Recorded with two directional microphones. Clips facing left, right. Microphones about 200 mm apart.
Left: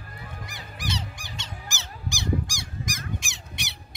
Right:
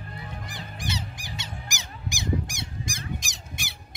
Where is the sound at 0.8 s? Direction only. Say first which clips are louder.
Left 1 dB; 10° right (ahead or behind).